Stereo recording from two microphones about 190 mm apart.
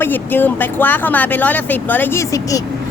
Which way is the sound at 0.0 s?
10° left (ahead or behind).